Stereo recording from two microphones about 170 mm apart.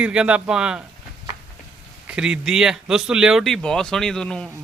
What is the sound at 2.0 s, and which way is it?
Speech, 5° right (ahead or behind).